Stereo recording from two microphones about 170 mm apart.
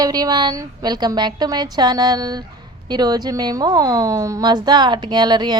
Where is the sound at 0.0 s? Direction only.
20° right (ahead or behind).